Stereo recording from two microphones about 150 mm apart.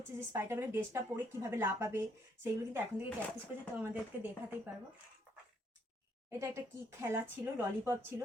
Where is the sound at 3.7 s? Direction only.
10° right (ahead or behind).